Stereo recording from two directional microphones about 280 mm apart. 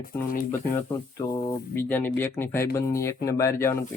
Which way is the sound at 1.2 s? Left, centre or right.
Centre.